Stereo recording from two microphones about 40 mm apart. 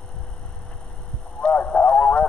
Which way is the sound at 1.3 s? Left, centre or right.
Left.